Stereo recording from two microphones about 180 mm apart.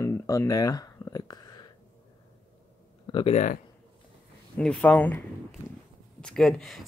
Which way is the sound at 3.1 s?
30° left (ahead or behind).